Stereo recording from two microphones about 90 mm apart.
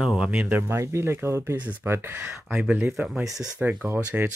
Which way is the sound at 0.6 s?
30° right (ahead or behind).